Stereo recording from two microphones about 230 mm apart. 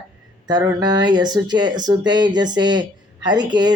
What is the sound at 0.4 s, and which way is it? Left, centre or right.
Speech, centre.